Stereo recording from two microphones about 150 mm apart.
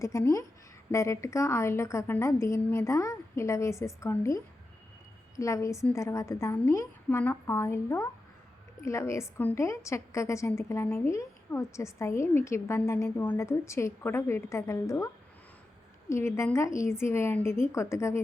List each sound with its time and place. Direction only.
0.0 s a woman's voice: 20° left (ahead or behind)
5.4 s a woman's voice: 20° left (ahead or behind)